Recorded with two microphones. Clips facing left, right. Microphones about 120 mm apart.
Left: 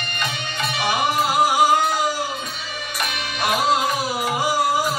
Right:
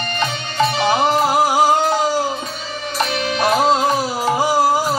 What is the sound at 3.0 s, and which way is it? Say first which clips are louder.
Music: right 7 dB; 35° right (ahead or behind).